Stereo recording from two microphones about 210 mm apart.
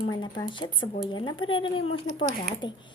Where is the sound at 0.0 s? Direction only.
20° left (ahead or behind).